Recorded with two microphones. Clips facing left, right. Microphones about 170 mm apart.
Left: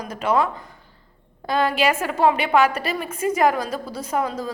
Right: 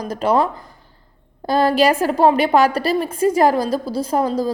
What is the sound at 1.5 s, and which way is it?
A woman's voice, 35° right (ahead or behind).